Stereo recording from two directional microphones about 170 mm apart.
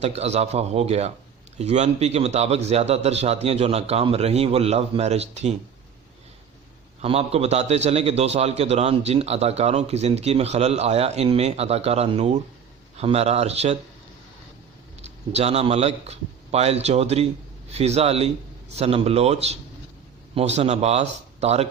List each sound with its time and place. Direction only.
0.0 s a man's voice: 40° right (ahead or behind)
7.0 s a man's voice: 35° right (ahead or behind)
15.0 s a man's voice: 40° right (ahead or behind)